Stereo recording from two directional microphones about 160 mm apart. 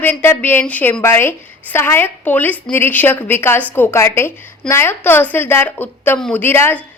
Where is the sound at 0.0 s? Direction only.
10° left (ahead or behind).